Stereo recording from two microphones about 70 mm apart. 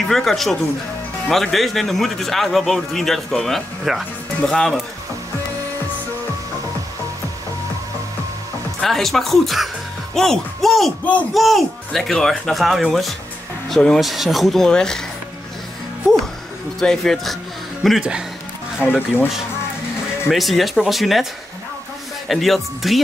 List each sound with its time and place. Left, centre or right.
0.1 s a man's voice: centre
8.8 s a man's voice: centre
16.8 s a man's voice: centre
18.9 s speech: left
20.2 s a man's voice: centre
22.3 s a man's voice: centre